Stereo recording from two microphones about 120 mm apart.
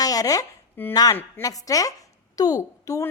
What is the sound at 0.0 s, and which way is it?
Chopping, 30° left (ahead or behind).